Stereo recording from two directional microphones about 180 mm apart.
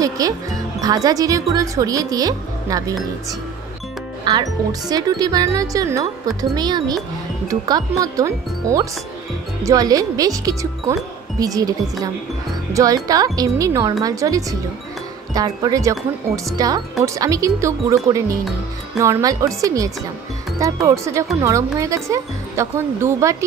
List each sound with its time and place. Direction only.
0.2 s speech: 20° right (ahead or behind)